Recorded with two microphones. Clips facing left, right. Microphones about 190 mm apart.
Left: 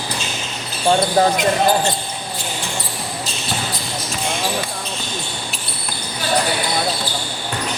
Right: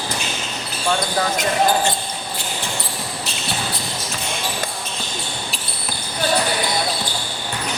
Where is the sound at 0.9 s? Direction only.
30° left (ahead or behind).